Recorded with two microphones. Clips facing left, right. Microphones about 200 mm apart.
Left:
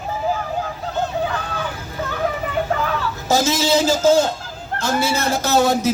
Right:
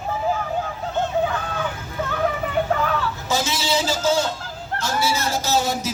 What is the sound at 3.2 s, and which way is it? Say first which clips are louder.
A man's voice: left 9 dB; 45° left (ahead or behind).